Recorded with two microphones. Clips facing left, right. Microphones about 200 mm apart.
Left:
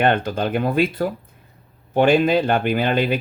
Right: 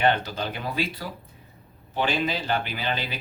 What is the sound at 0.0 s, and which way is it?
Speech, 55° left (ahead or behind).